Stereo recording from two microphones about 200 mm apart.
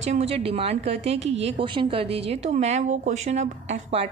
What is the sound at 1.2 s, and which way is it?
Speech, 65° right (ahead or behind).